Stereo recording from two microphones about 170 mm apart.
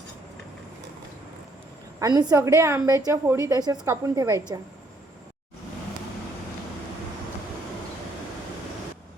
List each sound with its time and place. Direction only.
2.0 s a woman's voice: 20° right (ahead or behind)